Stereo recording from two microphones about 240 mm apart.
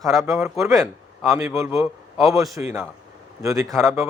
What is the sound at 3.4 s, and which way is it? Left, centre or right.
Speech, centre.